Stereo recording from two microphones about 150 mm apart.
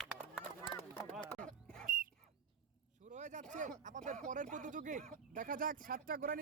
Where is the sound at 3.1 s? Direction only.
50° right (ahead or behind); by 6.3 s 70° right (ahead or behind).